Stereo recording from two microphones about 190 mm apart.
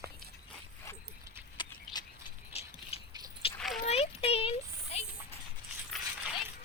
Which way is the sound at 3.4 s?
30° left (ahead or behind).